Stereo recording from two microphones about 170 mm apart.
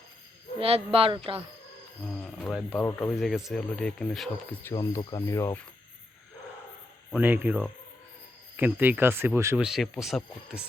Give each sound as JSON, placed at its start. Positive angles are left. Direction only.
{"t": 0.6, "sound": "speech", "side_deg": -35}
{"t": 2.0, "sound": "speech", "side_deg": 5}
{"t": 3.2, "sound": "speech", "side_deg": 0}
{"t": 4.7, "sound": "speech", "side_deg": 20}
{"t": 7.1, "sound": "speech", "side_deg": -10}
{"t": 9.6, "sound": "speech", "side_deg": 0}